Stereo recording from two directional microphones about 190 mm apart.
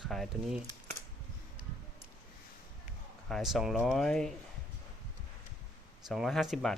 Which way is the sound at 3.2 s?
Centre (ahead or behind).